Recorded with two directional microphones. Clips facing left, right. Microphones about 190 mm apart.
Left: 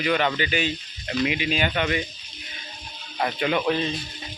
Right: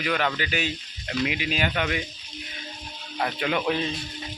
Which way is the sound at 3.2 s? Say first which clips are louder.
Left 2 dB; centre (ahead or behind).